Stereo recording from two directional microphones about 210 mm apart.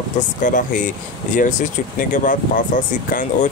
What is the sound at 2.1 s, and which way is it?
Speech, 40° left (ahead or behind).